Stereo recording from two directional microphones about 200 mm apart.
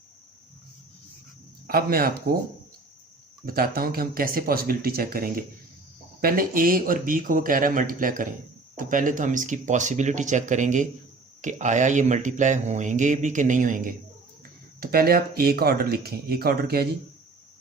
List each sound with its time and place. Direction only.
1.6 s speech: 45° right (ahead or behind)
3.4 s a man's voice: 45° right (ahead or behind)